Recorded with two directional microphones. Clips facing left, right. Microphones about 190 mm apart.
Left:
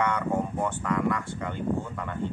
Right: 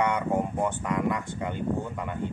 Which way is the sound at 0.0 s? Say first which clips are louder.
Right 1 dB; 15° right (ahead or behind).